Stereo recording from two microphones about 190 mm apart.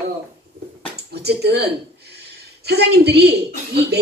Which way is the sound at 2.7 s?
60° right (ahead or behind).